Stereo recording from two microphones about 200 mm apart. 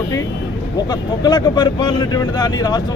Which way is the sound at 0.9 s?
20° left (ahead or behind).